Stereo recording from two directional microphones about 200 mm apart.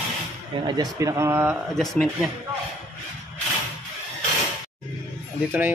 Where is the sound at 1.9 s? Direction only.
Centre (ahead or behind).